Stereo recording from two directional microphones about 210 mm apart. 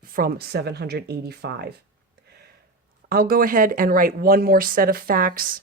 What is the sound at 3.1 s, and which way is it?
Speech, 45° right (ahead or behind).